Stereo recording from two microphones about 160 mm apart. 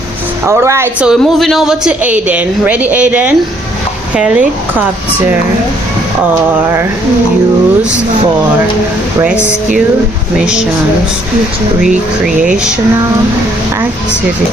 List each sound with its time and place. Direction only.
0.4 s a woman's voice: 15° right (ahead or behind)
1.0 s a woman's voice: centre (ahead or behind)
10.3 s speech: 5° right (ahead or behind)
11.8 s speech: 5° right (ahead or behind)